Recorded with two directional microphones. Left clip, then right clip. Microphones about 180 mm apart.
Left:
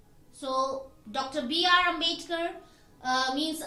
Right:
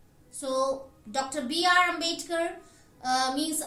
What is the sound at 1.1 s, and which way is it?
A woman's voice, 30° right (ahead or behind).